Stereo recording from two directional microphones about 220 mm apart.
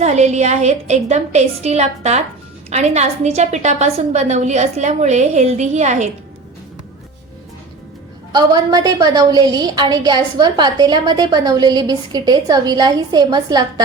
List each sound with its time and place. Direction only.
0.0 s a woman's voice: 30° right (ahead or behind)
8.3 s a woman's voice: 15° right (ahead or behind)